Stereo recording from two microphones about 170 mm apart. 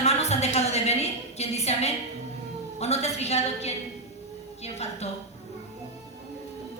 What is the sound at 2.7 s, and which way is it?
A woman's voice, 40° left (ahead or behind).